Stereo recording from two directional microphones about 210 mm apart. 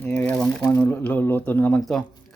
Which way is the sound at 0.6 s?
10° left (ahead or behind).